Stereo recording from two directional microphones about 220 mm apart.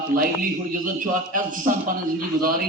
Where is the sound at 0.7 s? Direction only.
40° right (ahead or behind).